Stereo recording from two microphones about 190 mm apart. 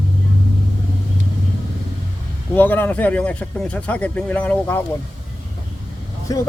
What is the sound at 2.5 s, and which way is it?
Speech, 10° left (ahead or behind).